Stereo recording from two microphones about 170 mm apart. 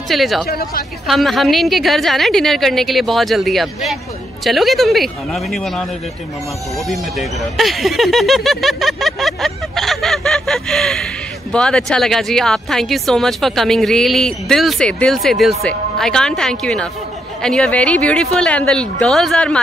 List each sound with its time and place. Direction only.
0.1 s speech: centre (ahead or behind)
0.5 s a woman's voice: 65° left (ahead or behind)
1.0 s speech: centre (ahead or behind)
6.9 s speech: centre (ahead or behind)